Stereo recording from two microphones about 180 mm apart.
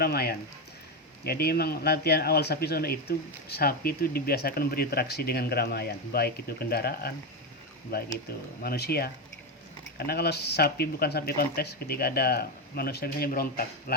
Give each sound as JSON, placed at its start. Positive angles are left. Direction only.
{"t": 0.0, "sound": "speech", "side_deg": 60}